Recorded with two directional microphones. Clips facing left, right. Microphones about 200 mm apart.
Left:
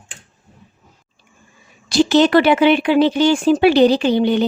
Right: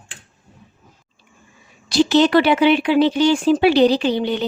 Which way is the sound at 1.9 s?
50° left (ahead or behind).